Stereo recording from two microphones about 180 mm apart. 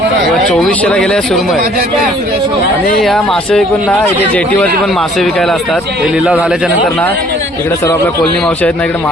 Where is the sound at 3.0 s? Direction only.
Centre (ahead or behind).